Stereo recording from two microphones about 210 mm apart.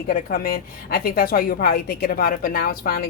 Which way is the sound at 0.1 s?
45° left (ahead or behind).